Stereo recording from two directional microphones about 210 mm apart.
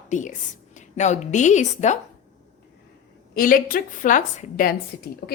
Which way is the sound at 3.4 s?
40° left (ahead or behind).